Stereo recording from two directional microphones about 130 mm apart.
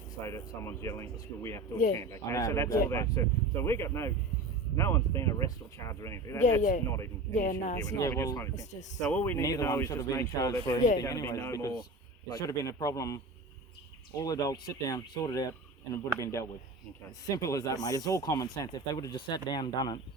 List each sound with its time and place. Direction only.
0.3 s speech: 20° left (ahead or behind)
6.6 s speech: 80° left
7.9 s speech: 25° left (ahead or behind)
14.2 s speech: 25° left (ahead or behind)